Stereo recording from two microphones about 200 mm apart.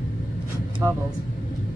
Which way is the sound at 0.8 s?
15° right (ahead or behind).